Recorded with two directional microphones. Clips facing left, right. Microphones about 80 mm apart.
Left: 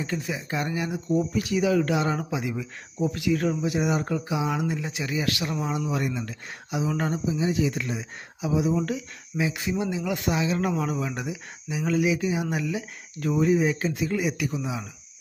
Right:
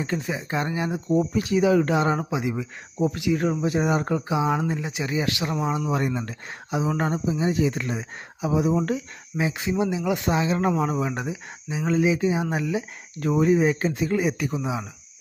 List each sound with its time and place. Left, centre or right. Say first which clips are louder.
0.0 s speech: right 3 dB; right
3.6 s speech: right 2 dB; right
4.8 s speech: right 2 dB; right
9.4 s speech: right 3 dB; right
10.3 s speech: right 3 dB; right